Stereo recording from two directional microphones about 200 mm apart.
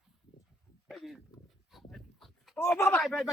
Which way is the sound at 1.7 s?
Centre (ahead or behind).